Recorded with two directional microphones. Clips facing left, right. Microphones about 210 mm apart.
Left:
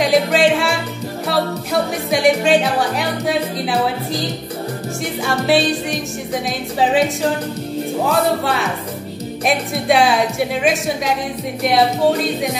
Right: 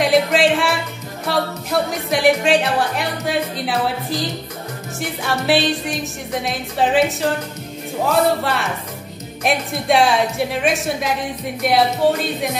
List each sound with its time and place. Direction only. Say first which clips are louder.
0.0 s music: left 1 dB; centre (ahead or behind)
5.2 s music: left 2 dB; centre (ahead or behind)
8.1 s music: right 2 dB; centre (ahead or behind)